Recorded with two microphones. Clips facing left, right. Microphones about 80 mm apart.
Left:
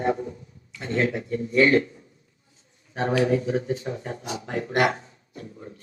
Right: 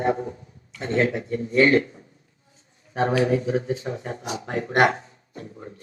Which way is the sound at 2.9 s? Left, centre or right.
Right.